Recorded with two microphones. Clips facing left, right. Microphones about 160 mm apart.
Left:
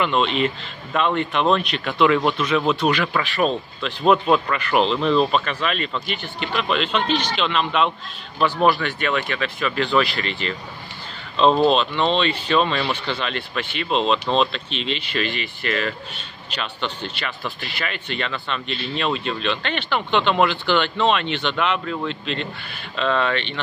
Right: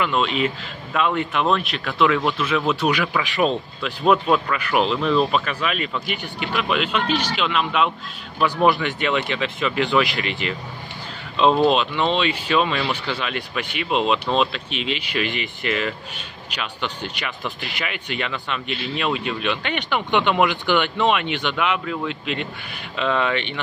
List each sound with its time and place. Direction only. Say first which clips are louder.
0.0 s speech: left 1 dB; 5° right (ahead or behind)
4.0 s speech: left 1 dB; centre (ahead or behind)
8.6 s speech: right 2 dB; 15° right (ahead or behind)